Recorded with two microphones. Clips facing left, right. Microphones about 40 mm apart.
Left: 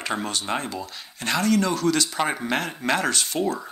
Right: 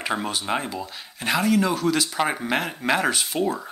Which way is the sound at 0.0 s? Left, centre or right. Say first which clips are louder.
Right 1 dB; centre.